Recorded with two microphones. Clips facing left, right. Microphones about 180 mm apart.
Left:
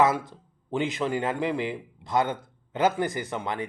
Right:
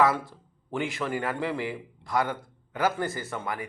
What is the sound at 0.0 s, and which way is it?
A man's voice, 20° left (ahead or behind).